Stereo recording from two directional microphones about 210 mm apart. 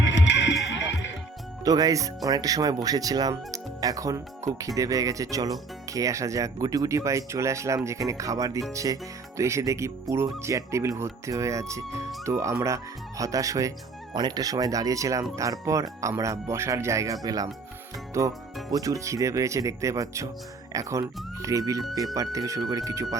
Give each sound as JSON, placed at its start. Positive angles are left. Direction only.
{"t": 0.0, "sound": "music", "side_deg": 60}
{"t": 1.6, "sound": "speech", "side_deg": -15}